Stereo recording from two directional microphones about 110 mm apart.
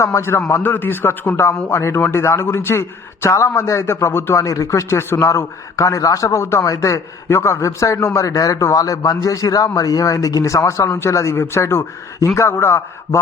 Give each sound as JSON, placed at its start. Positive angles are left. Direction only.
{"t": 0.0, "sound": "a man's voice", "side_deg": 25}